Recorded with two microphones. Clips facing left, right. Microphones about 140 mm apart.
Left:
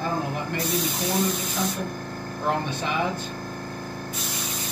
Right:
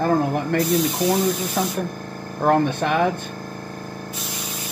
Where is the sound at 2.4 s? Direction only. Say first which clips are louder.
Right 9 dB; 55° right (ahead or behind).